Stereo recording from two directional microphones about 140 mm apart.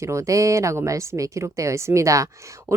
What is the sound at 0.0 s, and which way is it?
A woman's voice, 20° right (ahead or behind).